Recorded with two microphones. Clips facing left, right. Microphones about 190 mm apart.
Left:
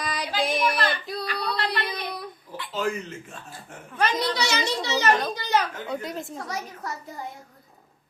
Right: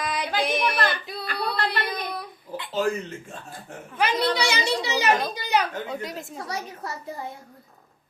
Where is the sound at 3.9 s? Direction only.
10° right (ahead or behind).